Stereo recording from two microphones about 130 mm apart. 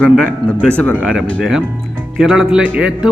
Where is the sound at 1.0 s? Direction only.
5° right (ahead or behind).